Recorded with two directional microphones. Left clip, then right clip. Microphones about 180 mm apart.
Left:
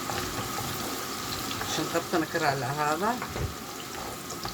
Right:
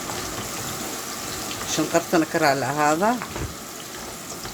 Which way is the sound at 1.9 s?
55° right (ahead or behind).